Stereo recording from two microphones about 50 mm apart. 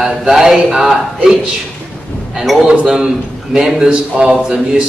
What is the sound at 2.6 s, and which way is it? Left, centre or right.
A man's voice, centre.